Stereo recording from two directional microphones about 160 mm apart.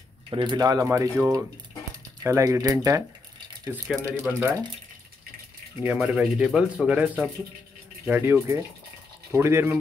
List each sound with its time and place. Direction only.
0.3 s speech: 30° right (ahead or behind)
3.7 s speech: 10° left (ahead or behind)
4.2 s speech: 15° right (ahead or behind)
5.9 s speech: 5° right (ahead or behind)
8.1 s speech: 15° right (ahead or behind)